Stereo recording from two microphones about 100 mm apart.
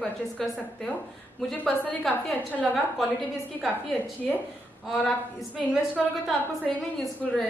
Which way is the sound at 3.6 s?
Centre (ahead or behind).